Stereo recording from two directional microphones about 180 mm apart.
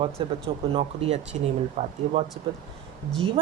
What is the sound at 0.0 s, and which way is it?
A woman's voice, 30° right (ahead or behind).